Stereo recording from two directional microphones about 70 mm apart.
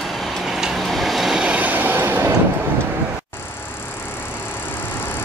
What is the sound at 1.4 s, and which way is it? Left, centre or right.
Train, right.